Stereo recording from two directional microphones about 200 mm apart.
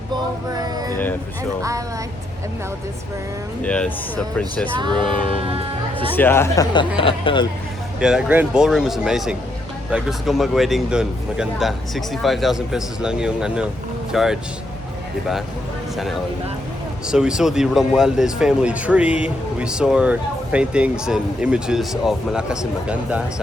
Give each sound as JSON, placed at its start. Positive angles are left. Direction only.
{"t": 0.1, "sound": "music", "side_deg": -20}
{"t": 3.6, "sound": "speech", "side_deg": 5}
{"t": 5.4, "sound": "music", "side_deg": -30}
{"t": 6.1, "sound": "speech", "side_deg": 10}
{"t": 6.7, "sound": "speech", "side_deg": 25}
{"t": 7.9, "sound": "speech", "side_deg": -5}
{"t": 17.1, "sound": "speech", "side_deg": -5}